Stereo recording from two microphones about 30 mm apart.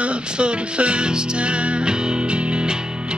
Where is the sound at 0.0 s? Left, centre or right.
Right.